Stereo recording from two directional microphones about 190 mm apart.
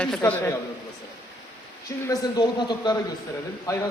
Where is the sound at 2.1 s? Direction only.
20° left (ahead or behind).